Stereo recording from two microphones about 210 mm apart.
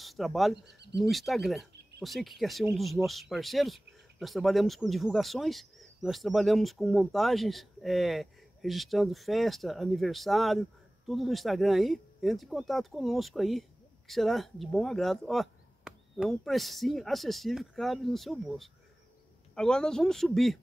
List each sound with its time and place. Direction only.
0.0 s speech: centre (ahead or behind)